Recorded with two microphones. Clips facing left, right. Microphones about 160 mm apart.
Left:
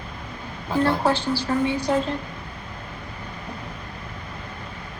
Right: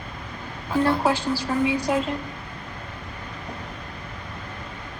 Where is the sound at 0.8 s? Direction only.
Centre (ahead or behind).